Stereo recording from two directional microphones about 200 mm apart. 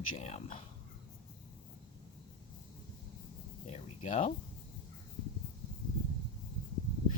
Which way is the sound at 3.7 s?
35° left (ahead or behind).